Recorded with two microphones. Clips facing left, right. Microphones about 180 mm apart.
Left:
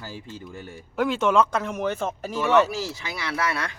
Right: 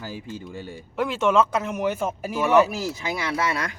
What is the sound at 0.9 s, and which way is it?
Speech, centre (ahead or behind).